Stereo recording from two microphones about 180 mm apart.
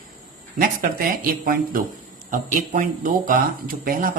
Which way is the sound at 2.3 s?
50° right (ahead or behind).